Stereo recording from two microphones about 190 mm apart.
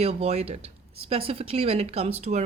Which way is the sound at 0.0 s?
35° right (ahead or behind).